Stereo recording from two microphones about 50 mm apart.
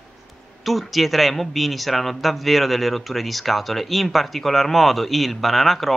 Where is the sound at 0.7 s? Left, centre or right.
Centre.